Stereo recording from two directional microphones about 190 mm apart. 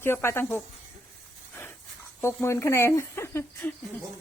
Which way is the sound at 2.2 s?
15° left (ahead or behind).